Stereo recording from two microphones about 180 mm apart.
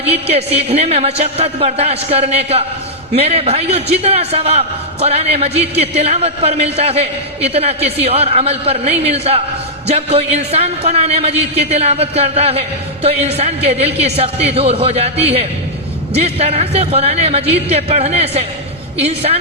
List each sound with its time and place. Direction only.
0.0 s a man's voice: 35° right (ahead or behind)